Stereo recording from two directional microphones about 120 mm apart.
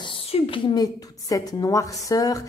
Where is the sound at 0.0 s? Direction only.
45° left (ahead or behind).